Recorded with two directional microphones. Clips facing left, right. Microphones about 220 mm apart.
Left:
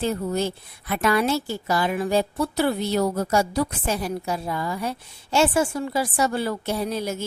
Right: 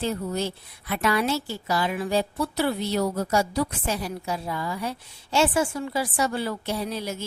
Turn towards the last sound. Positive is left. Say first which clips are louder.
# left 4 dB
turn(degrees=45)  # may be behind; listen again after turning